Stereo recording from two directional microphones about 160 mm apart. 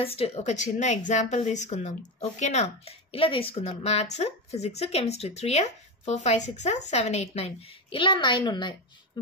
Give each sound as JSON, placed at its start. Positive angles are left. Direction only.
{"t": 0.0, "sound": "speech", "side_deg": 35}